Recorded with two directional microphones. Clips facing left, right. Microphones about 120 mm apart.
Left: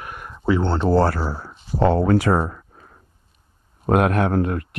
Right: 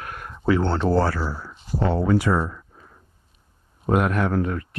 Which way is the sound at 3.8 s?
60° left (ahead or behind).